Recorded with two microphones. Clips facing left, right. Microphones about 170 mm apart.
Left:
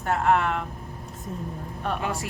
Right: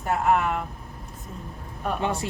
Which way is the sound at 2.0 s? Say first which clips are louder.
Right 3 dB; 25° right (ahead or behind).